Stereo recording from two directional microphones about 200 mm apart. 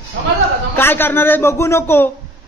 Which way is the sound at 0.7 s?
10° left (ahead or behind).